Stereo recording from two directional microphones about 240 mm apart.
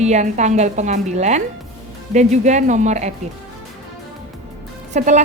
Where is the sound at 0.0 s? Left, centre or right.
Right.